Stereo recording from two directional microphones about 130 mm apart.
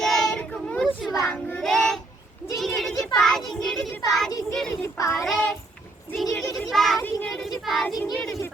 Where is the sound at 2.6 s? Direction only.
Centre (ahead or behind).